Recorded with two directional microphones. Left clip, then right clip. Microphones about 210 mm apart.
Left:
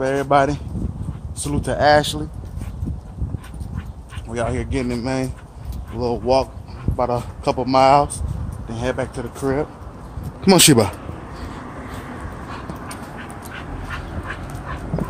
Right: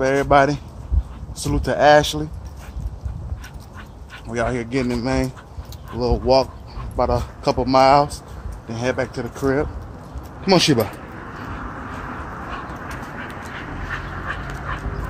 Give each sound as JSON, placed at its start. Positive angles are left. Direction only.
{"t": 0.0, "sound": "speech", "side_deg": -5}
{"t": 4.3, "sound": "speech", "side_deg": 0}
{"t": 10.4, "sound": "speech", "side_deg": 55}